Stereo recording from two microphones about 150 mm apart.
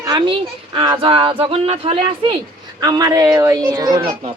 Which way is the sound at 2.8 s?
25° right (ahead or behind).